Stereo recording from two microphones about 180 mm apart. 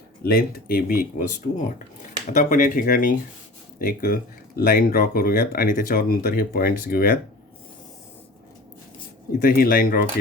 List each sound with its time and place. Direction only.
0.2 s speech: 55° left (ahead or behind)
9.4 s speech: 50° left (ahead or behind)